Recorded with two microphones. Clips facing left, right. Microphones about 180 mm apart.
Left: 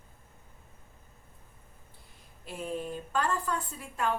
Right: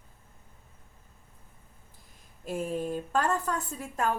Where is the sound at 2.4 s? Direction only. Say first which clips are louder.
Right 4 dB; 45° right (ahead or behind).